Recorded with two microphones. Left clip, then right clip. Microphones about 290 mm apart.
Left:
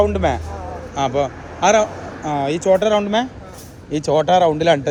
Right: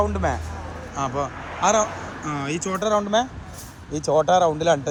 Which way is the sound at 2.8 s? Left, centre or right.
Left.